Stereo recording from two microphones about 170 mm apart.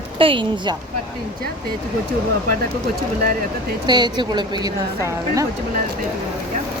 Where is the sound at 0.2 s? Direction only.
30° right (ahead or behind).